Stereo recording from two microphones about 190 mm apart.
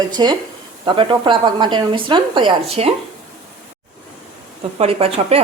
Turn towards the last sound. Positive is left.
turn(degrees=-30)  # may be behind; listen again after turning